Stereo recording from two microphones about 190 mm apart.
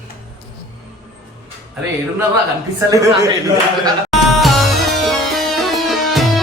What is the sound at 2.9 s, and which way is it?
Speech, 15° right (ahead or behind).